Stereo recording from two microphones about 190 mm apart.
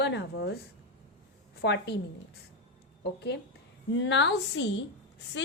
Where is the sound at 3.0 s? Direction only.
60° left (ahead or behind).